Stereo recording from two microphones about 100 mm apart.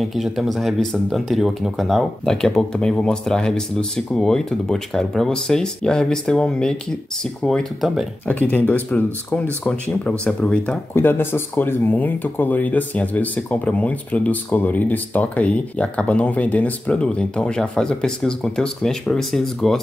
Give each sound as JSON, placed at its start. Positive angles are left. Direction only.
{"t": 0.0, "sound": "speech", "side_deg": 0}
{"t": 8.3, "sound": "speech", "side_deg": 15}
{"t": 11.0, "sound": "speech", "side_deg": 20}